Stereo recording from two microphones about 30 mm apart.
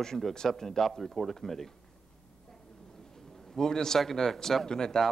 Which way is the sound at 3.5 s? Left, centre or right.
Centre.